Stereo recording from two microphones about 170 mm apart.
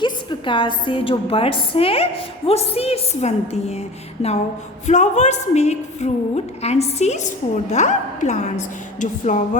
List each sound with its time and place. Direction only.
0.0 s a woman's voice: 30° left (ahead or behind)
4.9 s a woman's voice: 45° left (ahead or behind)